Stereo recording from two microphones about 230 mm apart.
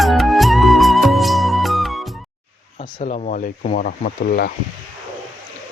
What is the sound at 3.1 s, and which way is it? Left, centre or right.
Speech, left.